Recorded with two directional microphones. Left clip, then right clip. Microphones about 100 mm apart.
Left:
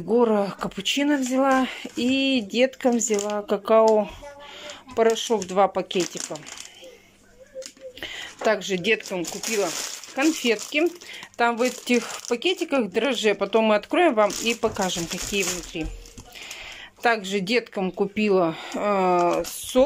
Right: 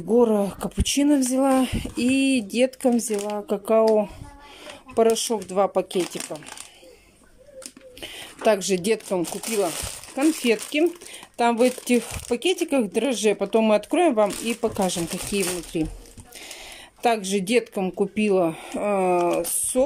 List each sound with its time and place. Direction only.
0.2 s speech: 25° right (ahead or behind)
4.9 s speech: 25° right (ahead or behind)
8.0 s speech: 25° right (ahead or behind)
9.3 s speech: 25° right (ahead or behind); by 15.9 s 50° right (ahead or behind)
17.0 s speech: 30° right (ahead or behind)